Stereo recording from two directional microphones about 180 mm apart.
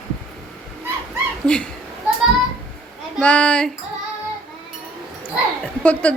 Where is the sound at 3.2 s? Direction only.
5° left (ahead or behind).